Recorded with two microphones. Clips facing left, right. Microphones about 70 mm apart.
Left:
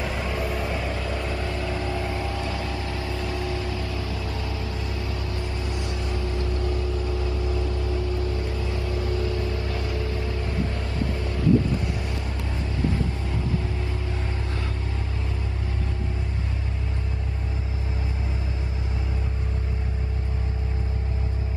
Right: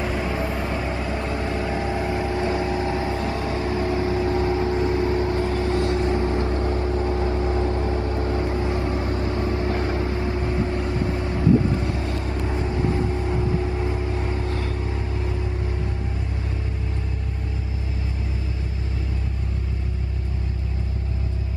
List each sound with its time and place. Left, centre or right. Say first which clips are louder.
0.0 s vehicle: right 3 dB; centre